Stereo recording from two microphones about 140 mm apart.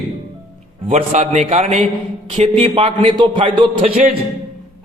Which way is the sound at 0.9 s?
55° right (ahead or behind).